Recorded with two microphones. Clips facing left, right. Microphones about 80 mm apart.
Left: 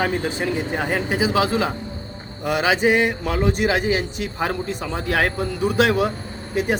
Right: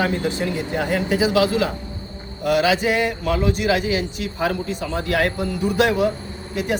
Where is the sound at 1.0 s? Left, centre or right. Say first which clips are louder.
Right 3 dB; left.